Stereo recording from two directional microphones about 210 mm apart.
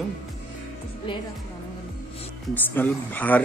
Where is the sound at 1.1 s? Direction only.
25° left (ahead or behind).